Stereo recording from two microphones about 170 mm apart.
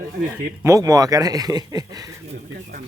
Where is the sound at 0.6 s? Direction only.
20° right (ahead or behind).